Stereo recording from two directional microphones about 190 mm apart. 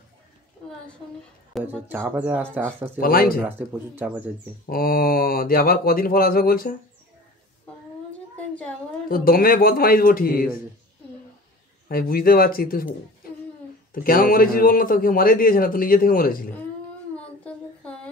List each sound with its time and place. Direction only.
1.5 s speech: 10° right (ahead or behind)
3.0 s a man's voice: 50° left (ahead or behind)
3.4 s speech: 10° right (ahead or behind)
4.6 s a man's voice: 50° left (ahead or behind)
9.1 s a man's voice: 50° left (ahead or behind)
11.9 s a man's voice: 50° left (ahead or behind)
13.9 s a man's voice: 50° left (ahead or behind)
17.5 s a sound: 5° left (ahead or behind)